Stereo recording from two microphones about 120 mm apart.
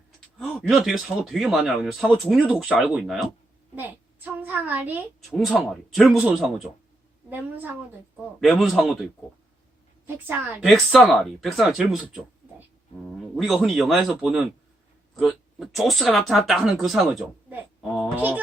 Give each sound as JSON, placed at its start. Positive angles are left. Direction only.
{"t": 0.3, "sound": "speech", "side_deg": 0}
{"t": 3.8, "sound": "a child's voice", "side_deg": -15}
{"t": 5.3, "sound": "speech", "side_deg": 5}
{"t": 6.2, "sound": "a woman's voice", "side_deg": -10}
{"t": 8.4, "sound": "speech", "side_deg": 0}
{"t": 10.6, "sound": "speech", "side_deg": 0}
{"t": 13.1, "sound": "speech", "side_deg": 0}